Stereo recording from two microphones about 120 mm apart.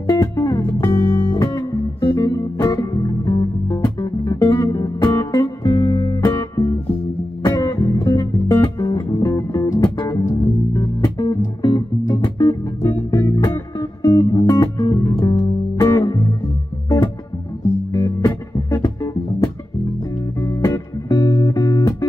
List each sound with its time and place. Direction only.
0.1 s music: 25° left (ahead or behind)
3.6 s music: 20° left (ahead or behind)
4.0 s music: 30° left (ahead or behind)
17.9 s music: 30° left (ahead or behind)
20.4 s music: 30° left (ahead or behind)